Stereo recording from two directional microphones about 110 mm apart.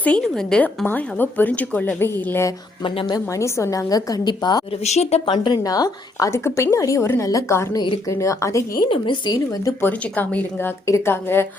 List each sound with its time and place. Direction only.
0.0 s a woman's voice: 5° left (ahead or behind)
0.9 s a woman's voice: 15° left (ahead or behind)
2.8 s a woman's voice: 50° left (ahead or behind)
3.3 s a woman's voice: 30° left (ahead or behind)
4.8 s speech: 80° left
5.3 s a woman's voice: 45° left (ahead or behind); by 7.8 s 25° left (ahead or behind)
7.8 s a woman's voice: 40° left (ahead or behind)
8.1 s speech: 30° left (ahead or behind)
8.9 s a woman's voice: 50° left (ahead or behind)
9.8 s a woman's voice: 15° left (ahead or behind)